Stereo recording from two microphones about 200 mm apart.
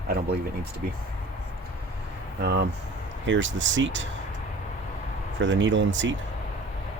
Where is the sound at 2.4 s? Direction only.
55° right (ahead or behind).